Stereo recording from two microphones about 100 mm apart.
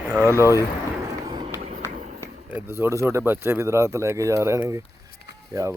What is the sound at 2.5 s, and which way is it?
Speech, 20° right (ahead or behind).